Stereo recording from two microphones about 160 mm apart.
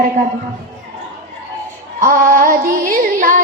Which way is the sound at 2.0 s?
60° right (ahead or behind).